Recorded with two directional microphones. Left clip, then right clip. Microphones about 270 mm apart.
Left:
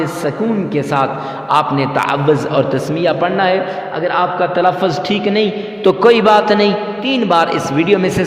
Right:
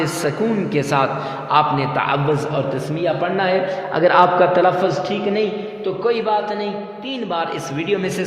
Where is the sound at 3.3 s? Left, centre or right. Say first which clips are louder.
Left 4 dB; centre.